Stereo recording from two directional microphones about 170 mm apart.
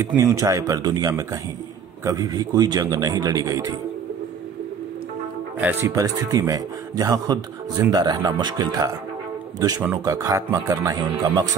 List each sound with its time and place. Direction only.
0.0 s a man's voice: 20° right (ahead or behind)
5.6 s a man's voice: 10° right (ahead or behind)